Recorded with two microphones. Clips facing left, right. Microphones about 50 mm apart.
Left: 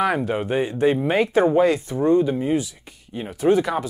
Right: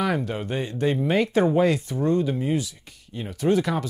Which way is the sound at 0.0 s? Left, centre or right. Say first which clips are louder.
Left 4 dB; left.